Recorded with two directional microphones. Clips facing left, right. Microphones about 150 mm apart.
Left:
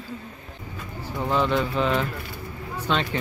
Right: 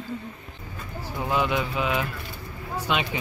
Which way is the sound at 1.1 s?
10° right (ahead or behind).